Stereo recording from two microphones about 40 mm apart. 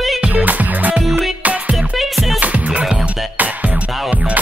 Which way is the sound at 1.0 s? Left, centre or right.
Centre.